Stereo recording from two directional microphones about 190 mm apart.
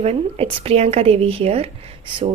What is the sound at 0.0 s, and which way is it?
A woman's voice, 30° right (ahead or behind).